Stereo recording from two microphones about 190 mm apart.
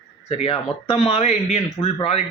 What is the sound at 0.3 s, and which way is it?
Speech, 30° left (ahead or behind).